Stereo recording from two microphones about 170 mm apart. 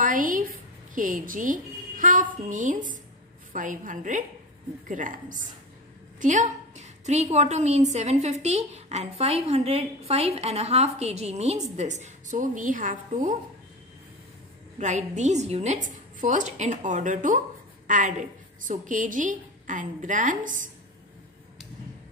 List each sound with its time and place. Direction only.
0.0 s a sound: 50° right (ahead or behind)
2.4 s a woman's voice: 50° right (ahead or behind)
14.8 s a woman's voice: 45° right (ahead or behind)